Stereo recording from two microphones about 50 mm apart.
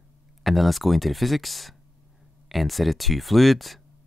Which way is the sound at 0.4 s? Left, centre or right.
Centre.